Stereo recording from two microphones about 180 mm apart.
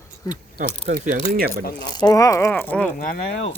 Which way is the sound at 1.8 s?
20° left (ahead or behind).